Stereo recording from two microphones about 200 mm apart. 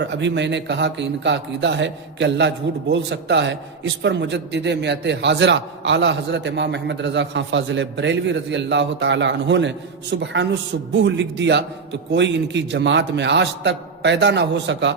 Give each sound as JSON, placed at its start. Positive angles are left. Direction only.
{"t": 0.0, "sound": "a man's voice", "side_deg": -65}